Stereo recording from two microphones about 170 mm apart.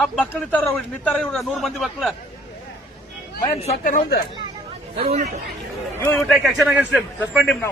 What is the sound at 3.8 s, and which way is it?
Speech, 60° left (ahead or behind).